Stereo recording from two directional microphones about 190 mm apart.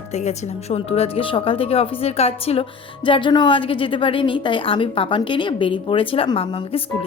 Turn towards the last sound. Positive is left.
turn(degrees=30)  # may be behind; listen again after turning